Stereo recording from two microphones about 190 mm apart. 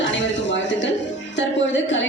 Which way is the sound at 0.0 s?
75° left (ahead or behind).